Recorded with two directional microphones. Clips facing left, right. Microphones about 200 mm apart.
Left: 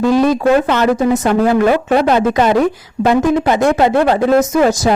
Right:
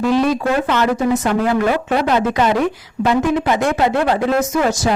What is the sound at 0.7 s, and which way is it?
A man's voice, 40° left (ahead or behind).